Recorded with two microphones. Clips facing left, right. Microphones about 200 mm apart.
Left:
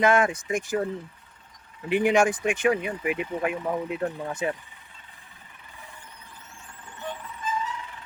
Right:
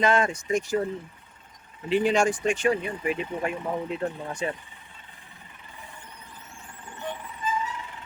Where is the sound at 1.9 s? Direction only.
15° left (ahead or behind).